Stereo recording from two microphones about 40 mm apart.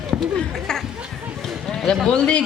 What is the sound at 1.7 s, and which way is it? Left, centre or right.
Speech, centre.